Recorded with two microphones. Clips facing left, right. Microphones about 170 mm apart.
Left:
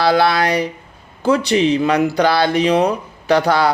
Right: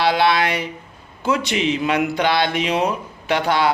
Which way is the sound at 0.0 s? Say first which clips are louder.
Left 3 dB; 40° left (ahead or behind).